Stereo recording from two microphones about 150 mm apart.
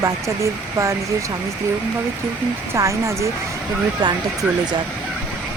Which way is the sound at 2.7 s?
20° right (ahead or behind).